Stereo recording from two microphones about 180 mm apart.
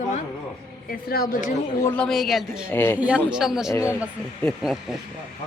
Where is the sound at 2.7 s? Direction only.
10° left (ahead or behind).